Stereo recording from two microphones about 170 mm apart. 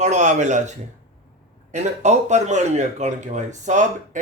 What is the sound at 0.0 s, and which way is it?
Speech, 45° right (ahead or behind).